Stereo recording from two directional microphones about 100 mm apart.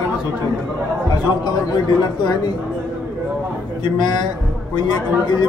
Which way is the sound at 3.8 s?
50° left (ahead or behind).